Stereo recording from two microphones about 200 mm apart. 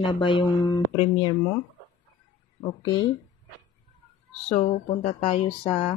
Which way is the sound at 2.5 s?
20° left (ahead or behind).